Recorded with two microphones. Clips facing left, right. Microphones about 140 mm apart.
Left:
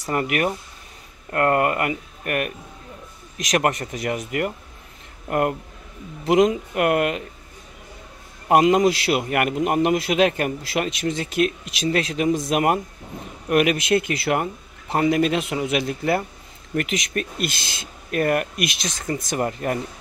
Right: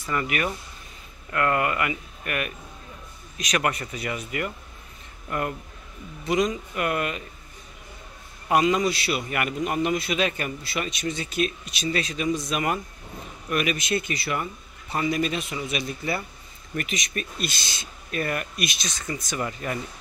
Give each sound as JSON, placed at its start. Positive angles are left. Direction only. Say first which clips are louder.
{"t": 0.0, "sound": "speech", "louder": "left 5 dB", "side_deg": 45}
{"t": 3.5, "sound": "a man's voice", "louder": "left 5 dB", "side_deg": 45}
{"t": 8.5, "sound": "a man's voice", "louder": "left 5 dB", "side_deg": 55}
{"t": 18.1, "sound": "a man's voice", "louder": "left 7 dB", "side_deg": 55}